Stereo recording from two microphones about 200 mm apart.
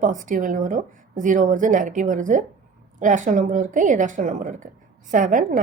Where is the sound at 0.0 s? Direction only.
40° right (ahead or behind).